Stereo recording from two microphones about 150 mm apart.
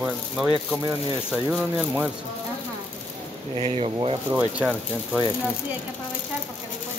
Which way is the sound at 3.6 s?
45° right (ahead or behind).